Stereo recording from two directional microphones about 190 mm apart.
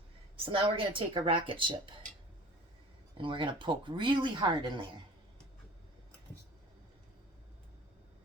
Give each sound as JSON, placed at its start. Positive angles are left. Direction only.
{"t": 0.4, "sound": "speech", "side_deg": -25}
{"t": 3.2, "sound": "speech", "side_deg": -25}